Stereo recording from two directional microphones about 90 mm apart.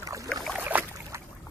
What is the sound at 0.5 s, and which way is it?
Boat, 20° right (ahead or behind).